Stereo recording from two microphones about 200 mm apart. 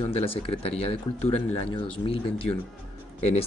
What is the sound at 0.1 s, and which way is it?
Speech, 30° left (ahead or behind).